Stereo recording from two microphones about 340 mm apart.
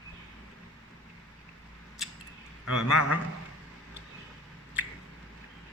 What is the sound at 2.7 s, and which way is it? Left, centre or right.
Speech, centre.